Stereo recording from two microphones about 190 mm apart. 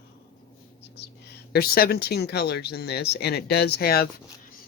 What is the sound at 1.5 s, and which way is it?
Speech, 55° left (ahead or behind).